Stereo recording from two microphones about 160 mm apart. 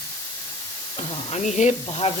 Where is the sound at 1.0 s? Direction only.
40° left (ahead or behind).